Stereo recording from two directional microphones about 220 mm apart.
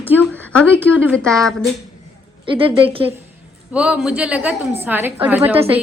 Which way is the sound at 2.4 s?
25° right (ahead or behind).